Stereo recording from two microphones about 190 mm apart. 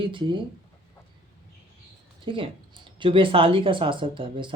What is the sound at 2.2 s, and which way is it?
Speech, 25° right (ahead or behind).